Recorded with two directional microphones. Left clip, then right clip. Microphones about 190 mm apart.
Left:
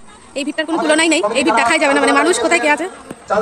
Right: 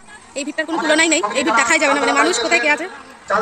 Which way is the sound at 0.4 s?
5° right (ahead or behind).